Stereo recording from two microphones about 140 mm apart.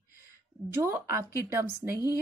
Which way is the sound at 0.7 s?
15° right (ahead or behind).